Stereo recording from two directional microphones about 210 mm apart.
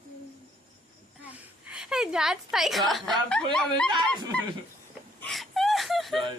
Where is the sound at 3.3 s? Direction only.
5° left (ahead or behind).